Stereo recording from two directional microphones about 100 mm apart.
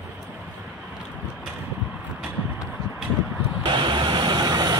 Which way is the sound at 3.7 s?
50° right (ahead or behind).